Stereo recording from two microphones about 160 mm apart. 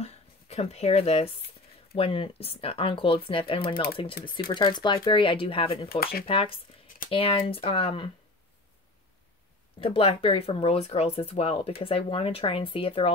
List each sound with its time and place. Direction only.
0.0 s a sound: 40° left (ahead or behind)
2.0 s speech: 35° left (ahead or behind)
5.9 s speech: 70° left (ahead or behind)
6.2 s speech: 35° left (ahead or behind)
9.8 s speech: 35° left (ahead or behind)